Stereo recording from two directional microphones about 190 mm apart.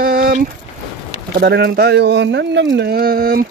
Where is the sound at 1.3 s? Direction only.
55° right (ahead or behind).